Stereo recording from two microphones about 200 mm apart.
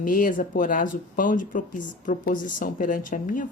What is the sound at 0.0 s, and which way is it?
Speech, 45° left (ahead or behind).